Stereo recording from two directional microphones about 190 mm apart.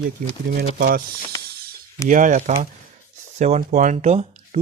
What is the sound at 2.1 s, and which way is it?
Speech, 40° right (ahead or behind).